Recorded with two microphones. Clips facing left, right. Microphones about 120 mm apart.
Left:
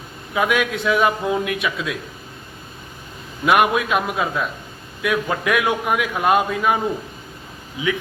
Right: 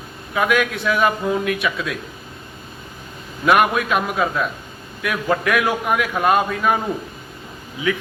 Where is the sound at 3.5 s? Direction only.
15° left (ahead or behind).